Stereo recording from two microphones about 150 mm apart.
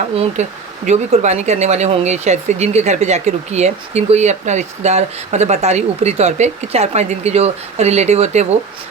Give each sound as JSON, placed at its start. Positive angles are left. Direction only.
{"t": 0.4, "sound": "speech", "side_deg": -50}